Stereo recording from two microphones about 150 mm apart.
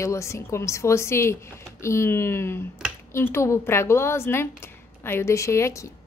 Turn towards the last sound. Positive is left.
turn(degrees=20)  # may be behind; listen again after turning